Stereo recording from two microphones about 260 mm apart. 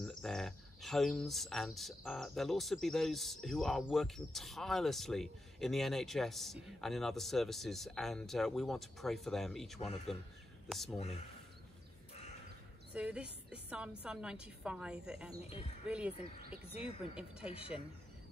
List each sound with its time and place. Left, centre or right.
0.0 s speech: centre
12.9 s a woman's voice: centre
16.7 s a woman's voice: left